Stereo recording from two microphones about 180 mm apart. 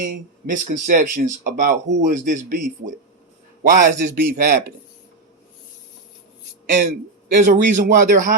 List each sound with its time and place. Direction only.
0.0 s speech: 45° right (ahead or behind)
6.7 s speech: 45° right (ahead or behind)